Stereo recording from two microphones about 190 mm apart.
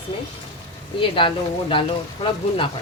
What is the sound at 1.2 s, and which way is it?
Speech, 25° left (ahead or behind).